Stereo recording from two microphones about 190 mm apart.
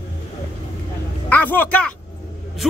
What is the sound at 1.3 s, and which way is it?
Speech, 10° left (ahead or behind).